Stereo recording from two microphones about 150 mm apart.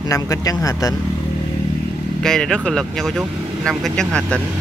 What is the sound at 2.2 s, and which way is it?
Speech, 5° left (ahead or behind).